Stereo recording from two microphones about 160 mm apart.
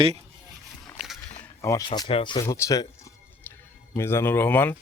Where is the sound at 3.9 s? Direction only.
15° left (ahead or behind).